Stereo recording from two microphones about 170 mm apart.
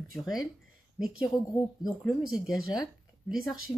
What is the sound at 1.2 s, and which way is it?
Speech, 25° left (ahead or behind).